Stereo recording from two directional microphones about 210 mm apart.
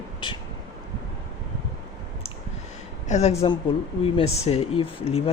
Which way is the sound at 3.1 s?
30° left (ahead or behind).